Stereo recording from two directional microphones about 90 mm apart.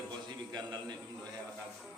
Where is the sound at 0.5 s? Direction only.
50° right (ahead or behind).